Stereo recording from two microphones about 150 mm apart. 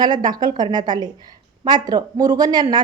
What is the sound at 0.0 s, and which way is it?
Speech, 30° right (ahead or behind).